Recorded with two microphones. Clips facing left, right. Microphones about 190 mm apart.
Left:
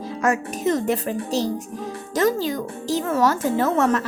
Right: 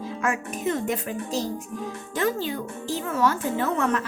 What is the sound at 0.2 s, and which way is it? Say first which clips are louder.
Speech: left 6 dB; 40° left (ahead or behind).